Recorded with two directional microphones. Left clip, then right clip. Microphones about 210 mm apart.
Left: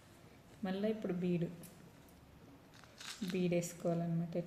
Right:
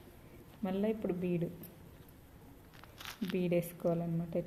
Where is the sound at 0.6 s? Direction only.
35° right (ahead or behind).